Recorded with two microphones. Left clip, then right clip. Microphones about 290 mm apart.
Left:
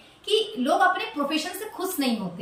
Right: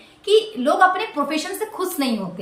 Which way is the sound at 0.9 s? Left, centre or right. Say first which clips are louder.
Right 4 dB; centre.